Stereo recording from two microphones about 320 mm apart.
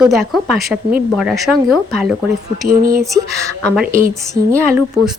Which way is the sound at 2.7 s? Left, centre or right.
Right.